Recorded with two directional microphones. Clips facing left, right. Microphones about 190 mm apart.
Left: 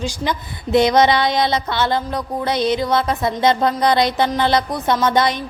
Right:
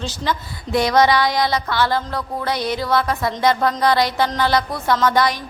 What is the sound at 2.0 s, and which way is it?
Music, 20° left (ahead or behind).